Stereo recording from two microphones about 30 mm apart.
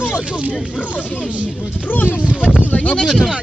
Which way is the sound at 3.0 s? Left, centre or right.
Left.